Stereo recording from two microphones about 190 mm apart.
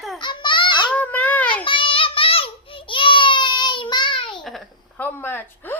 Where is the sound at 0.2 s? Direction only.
25° left (ahead or behind).